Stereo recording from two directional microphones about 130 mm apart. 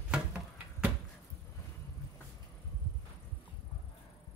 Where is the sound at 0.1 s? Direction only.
10° right (ahead or behind).